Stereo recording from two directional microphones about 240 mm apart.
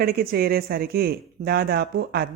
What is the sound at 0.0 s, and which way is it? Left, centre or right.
Speech, right.